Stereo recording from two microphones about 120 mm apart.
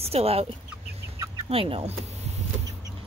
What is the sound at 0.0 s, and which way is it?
Speech, 55° right (ahead or behind).